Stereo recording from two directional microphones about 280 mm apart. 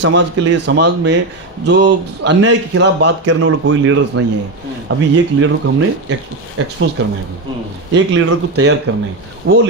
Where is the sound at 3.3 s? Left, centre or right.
Right.